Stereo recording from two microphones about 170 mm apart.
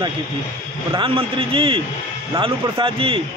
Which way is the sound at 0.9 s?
30° right (ahead or behind).